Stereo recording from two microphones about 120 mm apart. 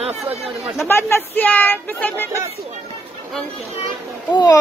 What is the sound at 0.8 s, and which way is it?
Speech, 20° left (ahead or behind).